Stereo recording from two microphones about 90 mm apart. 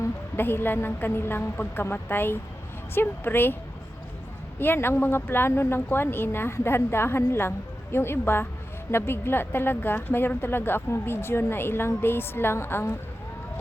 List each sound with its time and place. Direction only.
0.0 s a woman's voice: 25° left (ahead or behind)
4.6 s a woman's voice: 25° left (ahead or behind)